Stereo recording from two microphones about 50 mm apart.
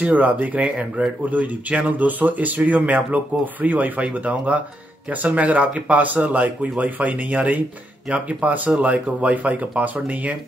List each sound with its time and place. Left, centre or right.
0.0 s speech: right